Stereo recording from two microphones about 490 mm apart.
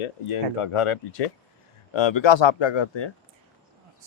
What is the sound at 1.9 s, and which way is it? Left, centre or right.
Speech, left.